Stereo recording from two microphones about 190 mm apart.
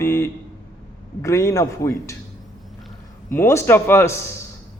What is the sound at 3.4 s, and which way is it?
Speech, 15° left (ahead or behind).